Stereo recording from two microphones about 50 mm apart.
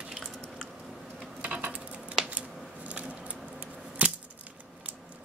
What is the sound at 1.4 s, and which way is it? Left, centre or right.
Coin, right.